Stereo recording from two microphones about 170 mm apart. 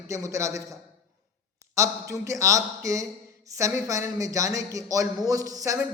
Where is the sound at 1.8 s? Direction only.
20° right (ahead or behind).